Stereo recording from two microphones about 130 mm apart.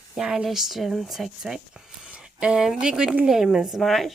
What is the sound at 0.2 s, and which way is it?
Speech, 5° right (ahead or behind).